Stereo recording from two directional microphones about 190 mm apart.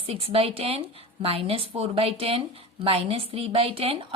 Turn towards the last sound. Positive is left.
turn(degrees=-30)  # may be behind; listen again after turning